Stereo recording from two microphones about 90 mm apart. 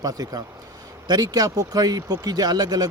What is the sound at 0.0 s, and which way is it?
Speech, 45° right (ahead or behind).